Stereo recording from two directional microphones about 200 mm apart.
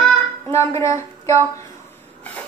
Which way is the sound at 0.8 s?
15° left (ahead or behind).